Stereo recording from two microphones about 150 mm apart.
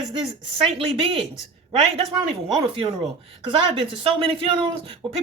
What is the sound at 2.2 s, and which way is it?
Speech, 35° right (ahead or behind).